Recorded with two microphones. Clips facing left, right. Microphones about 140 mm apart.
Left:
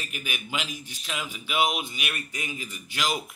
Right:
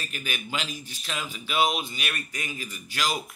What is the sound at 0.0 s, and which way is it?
A man's voice, 15° left (ahead or behind).